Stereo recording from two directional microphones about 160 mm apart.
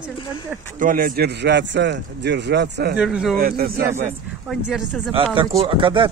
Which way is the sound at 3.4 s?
65° right (ahead or behind).